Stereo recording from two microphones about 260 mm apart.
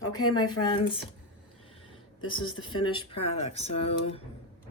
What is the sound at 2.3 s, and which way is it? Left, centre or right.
Speech, centre.